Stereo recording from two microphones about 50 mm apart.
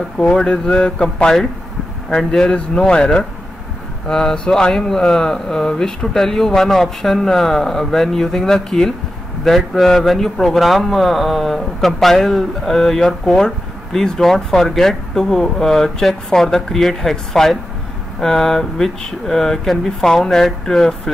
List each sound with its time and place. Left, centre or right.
0.3 s a man's voice: centre